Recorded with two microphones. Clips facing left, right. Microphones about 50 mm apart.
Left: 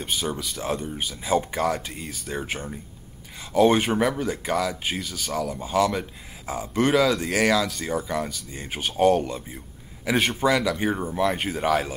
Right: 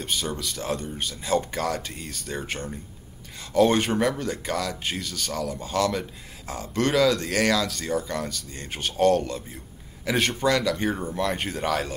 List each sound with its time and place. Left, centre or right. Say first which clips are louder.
0.0 s speech: left 1 dB; centre